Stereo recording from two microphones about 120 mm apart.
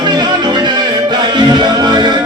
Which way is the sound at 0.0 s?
35° right (ahead or behind).